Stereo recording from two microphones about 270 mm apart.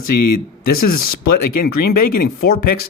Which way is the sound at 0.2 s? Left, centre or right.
Left.